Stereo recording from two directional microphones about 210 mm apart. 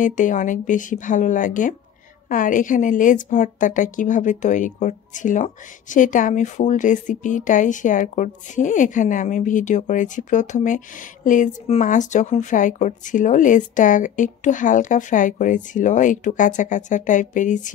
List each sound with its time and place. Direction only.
0.0 s a woman's voice: 40° left (ahead or behind)